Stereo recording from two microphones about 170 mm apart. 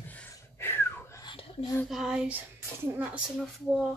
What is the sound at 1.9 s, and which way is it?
Child singing, centre (ahead or behind).